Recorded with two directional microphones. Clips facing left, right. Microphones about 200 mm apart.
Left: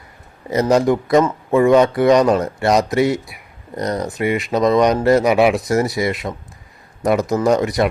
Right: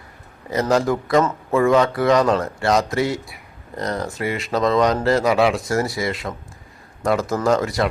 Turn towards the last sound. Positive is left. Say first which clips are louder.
# left 3 dB
turn(degrees=20)  # may be behind; listen again after turning